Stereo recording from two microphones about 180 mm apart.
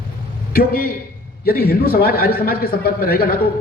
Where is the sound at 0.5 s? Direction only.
55° left (ahead or behind).